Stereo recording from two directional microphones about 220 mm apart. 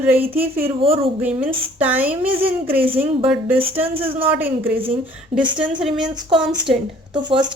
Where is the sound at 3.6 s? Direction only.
25° right (ahead or behind).